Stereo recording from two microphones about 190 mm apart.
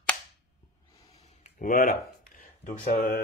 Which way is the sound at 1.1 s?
35° left (ahead or behind).